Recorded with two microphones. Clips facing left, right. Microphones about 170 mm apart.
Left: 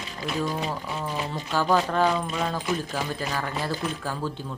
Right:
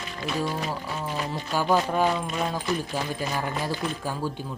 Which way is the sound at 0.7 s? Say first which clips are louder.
Even; 5° right (ahead or behind).